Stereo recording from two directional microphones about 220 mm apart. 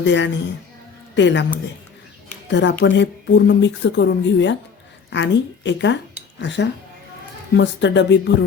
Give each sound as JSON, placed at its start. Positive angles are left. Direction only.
{"t": 0.0, "sound": "a man's voice", "side_deg": 55}
{"t": 2.5, "sound": "speech", "side_deg": 55}